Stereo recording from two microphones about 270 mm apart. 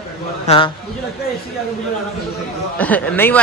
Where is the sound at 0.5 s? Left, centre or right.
Left.